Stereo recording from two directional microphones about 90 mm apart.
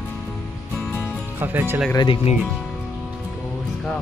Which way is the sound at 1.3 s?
20° right (ahead or behind).